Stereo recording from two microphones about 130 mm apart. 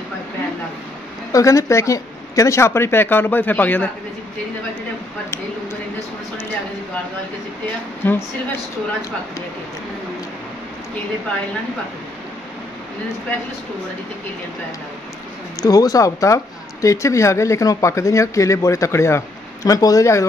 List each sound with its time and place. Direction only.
1.3 s speech: 25° left (ahead or behind)
8.0 s a woman's voice: 15° left (ahead or behind)
15.6 s speech: 25° left (ahead or behind)